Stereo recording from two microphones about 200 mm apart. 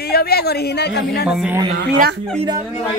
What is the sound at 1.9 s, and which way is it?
Speech, 50° right (ahead or behind).